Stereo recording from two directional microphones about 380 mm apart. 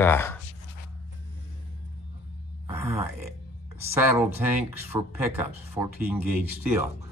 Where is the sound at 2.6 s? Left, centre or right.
Centre.